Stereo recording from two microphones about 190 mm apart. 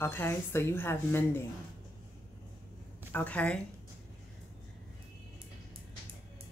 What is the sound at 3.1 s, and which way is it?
Speech, 10° left (ahead or behind).